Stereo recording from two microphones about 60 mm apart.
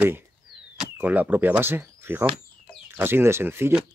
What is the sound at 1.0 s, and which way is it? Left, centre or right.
Speech, right.